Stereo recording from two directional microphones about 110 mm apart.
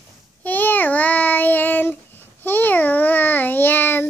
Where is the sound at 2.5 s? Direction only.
15° left (ahead or behind).